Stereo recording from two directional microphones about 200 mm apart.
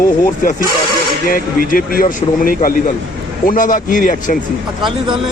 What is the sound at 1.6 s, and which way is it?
Speech, 45° left (ahead or behind).